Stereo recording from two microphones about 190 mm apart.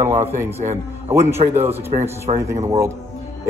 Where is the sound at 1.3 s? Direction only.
35° right (ahead or behind).